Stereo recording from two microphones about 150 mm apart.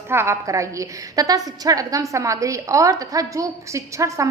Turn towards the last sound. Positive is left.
turn(degrees=-20)  # may be behind; listen again after turning